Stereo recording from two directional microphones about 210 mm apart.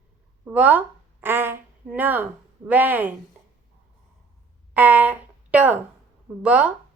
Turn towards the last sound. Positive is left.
turn(degrees=-5)  # may be behind; listen again after turning